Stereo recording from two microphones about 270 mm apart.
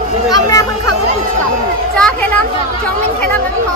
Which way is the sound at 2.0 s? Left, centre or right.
Centre.